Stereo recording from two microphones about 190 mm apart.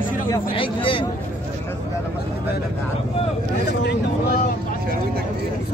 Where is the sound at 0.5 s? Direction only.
25° left (ahead or behind).